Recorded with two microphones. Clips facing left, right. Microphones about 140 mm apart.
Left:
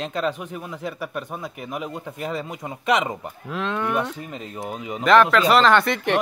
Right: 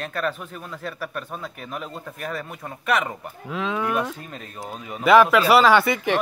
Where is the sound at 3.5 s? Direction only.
Centre (ahead or behind).